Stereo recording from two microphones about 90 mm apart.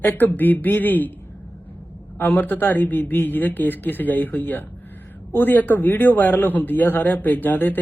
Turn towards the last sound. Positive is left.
turn(degrees=20)  # may be behind; listen again after turning